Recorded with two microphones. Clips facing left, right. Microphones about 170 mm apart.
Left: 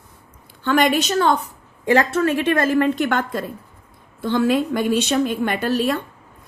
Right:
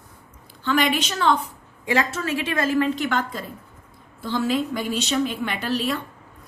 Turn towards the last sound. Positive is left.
turn(degrees=50)  # may be behind; listen again after turning